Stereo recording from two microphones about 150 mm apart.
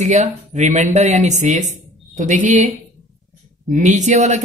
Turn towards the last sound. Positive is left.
turn(degrees=-50)  # may be behind; listen again after turning